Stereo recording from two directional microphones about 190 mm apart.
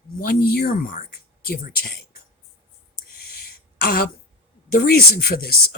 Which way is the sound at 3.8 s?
50° left (ahead or behind).